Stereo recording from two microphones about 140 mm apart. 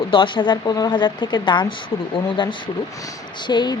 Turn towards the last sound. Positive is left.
turn(degrees=30)  # may be behind; listen again after turning